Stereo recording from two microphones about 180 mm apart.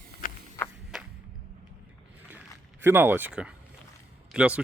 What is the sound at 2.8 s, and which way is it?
Speech, 10° right (ahead or behind).